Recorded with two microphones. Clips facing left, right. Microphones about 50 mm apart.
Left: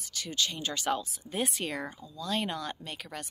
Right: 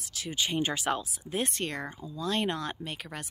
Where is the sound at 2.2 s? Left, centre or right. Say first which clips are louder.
Right 2 dB; centre.